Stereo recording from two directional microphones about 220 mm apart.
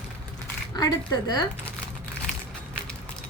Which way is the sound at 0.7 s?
15° left (ahead or behind).